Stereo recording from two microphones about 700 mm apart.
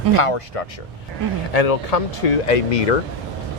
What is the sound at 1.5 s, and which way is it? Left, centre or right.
Speech, left.